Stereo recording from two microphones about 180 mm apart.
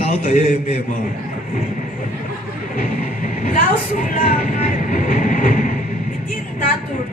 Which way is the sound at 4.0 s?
45° left (ahead or behind).